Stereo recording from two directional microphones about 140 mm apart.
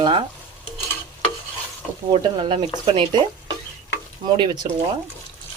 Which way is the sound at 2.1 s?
35° right (ahead or behind).